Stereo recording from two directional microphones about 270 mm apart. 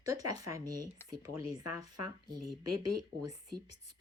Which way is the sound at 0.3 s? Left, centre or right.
Centre.